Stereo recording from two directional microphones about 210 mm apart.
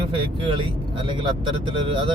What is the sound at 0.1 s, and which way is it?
Speech, 25° right (ahead or behind).